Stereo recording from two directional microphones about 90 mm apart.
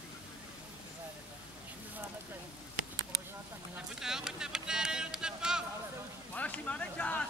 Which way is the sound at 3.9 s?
5° right (ahead or behind).